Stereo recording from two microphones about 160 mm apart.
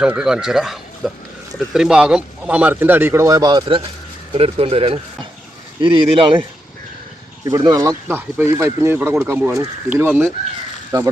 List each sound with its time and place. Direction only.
0.0 s speech: 5° right (ahead or behind); by 6.3 s 35° right (ahead or behind)
7.4 s speech: 20° right (ahead or behind)